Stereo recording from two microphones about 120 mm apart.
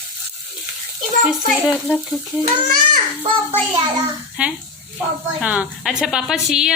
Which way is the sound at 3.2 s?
55° right (ahead or behind).